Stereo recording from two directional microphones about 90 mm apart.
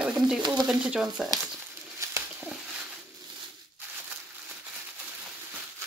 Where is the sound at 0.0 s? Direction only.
10° right (ahead or behind).